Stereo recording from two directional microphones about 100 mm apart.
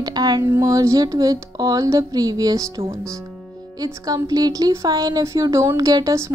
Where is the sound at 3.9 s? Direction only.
40° right (ahead or behind).